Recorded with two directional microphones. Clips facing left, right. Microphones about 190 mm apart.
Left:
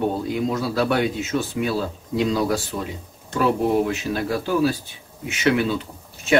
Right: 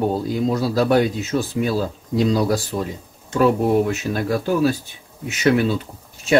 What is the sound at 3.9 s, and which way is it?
Speech, 45° right (ahead or behind).